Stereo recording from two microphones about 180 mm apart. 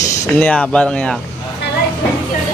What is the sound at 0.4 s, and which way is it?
Speech, 5° left (ahead or behind).